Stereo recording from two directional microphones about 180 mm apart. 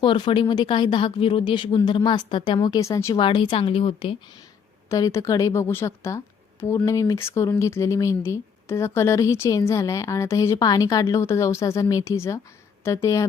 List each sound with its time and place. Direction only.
0.0 s speech: 30° left (ahead or behind)
3.2 s speech: 30° left (ahead or behind)
4.9 s a woman's voice: 20° left (ahead or behind)